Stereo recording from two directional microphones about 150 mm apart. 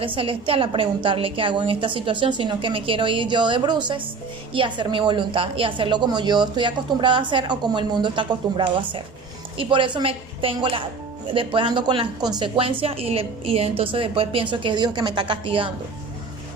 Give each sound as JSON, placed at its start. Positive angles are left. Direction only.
{"t": 0.0, "sound": "a woman's voice", "side_deg": -35}